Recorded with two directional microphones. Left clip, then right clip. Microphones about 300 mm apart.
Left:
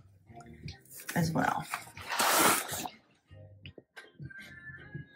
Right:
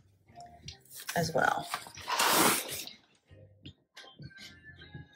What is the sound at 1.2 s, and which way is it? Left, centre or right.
Speech, centre.